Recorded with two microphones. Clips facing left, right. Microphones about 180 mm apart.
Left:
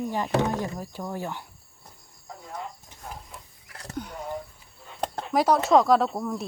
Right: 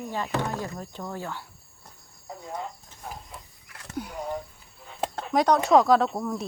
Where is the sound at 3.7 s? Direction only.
35° left (ahead or behind).